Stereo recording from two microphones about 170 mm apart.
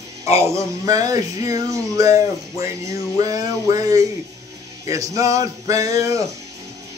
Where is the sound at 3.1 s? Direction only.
20° right (ahead or behind).